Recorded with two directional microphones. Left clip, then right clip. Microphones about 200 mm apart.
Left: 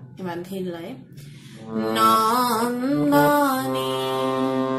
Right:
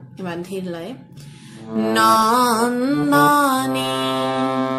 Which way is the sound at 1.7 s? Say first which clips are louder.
Right 3 dB; 30° right (ahead or behind).